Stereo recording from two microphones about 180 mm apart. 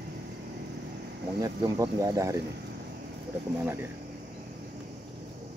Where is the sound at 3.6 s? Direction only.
15° right (ahead or behind).